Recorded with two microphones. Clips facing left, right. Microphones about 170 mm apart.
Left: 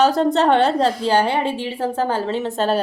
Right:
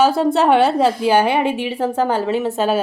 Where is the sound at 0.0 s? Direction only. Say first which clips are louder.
Right 1 dB; 5° right (ahead or behind).